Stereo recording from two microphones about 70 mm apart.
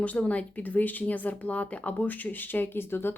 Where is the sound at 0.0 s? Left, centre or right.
Centre.